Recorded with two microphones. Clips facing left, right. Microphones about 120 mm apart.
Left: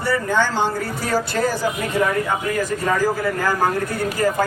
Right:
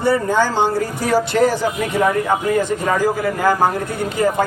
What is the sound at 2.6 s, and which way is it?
Speech, 20° right (ahead or behind).